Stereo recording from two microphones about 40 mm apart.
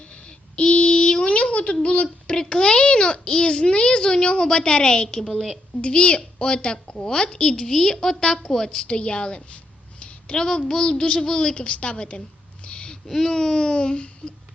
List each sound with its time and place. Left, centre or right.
0.3 s a sound: left
2.3 s a child's voice: centre
5.2 s a woman's voice: centre
5.8 s a child's voice: left
12.6 s a sound: left
13.1 s a child's voice: centre; by 14.1 s left